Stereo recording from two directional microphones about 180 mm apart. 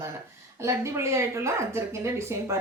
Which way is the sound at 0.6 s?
15° right (ahead or behind).